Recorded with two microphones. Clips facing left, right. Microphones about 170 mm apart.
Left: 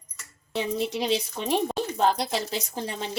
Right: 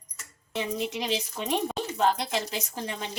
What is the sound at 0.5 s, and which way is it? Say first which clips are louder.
A woman's voice: left 3 dB; 30° left (ahead or behind).